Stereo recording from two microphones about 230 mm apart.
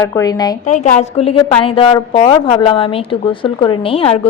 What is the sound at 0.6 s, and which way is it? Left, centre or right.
A woman's voice, left.